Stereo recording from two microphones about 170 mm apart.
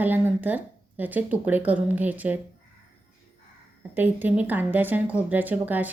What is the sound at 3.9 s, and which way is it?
A woman's voice, 10° right (ahead or behind).